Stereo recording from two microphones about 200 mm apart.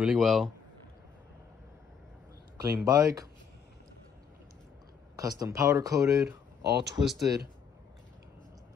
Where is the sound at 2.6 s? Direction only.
15° right (ahead or behind).